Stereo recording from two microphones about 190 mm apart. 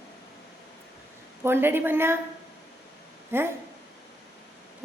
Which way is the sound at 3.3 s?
10° right (ahead or behind).